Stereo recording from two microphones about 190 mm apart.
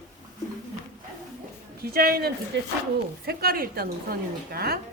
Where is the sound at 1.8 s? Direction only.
55° right (ahead or behind).